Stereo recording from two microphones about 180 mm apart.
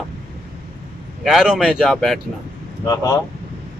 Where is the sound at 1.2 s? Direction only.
5° right (ahead or behind).